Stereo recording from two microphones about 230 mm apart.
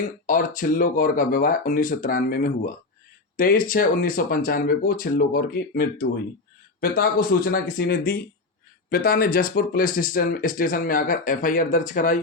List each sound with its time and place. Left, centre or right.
0.3 s speech: left